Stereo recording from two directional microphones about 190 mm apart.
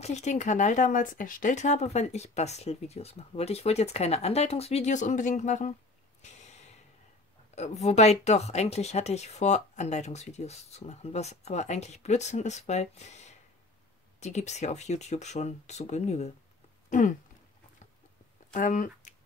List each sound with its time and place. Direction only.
0.0 s speech: 35° left (ahead or behind)
6.2 s snort: 35° left (ahead or behind)
7.5 s speech: 35° left (ahead or behind)
18.5 s speech: 45° left (ahead or behind)